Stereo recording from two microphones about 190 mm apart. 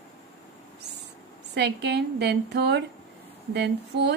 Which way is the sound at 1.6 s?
60° right (ahead or behind).